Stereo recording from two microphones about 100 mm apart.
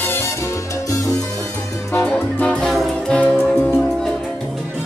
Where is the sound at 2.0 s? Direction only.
15° left (ahead or behind).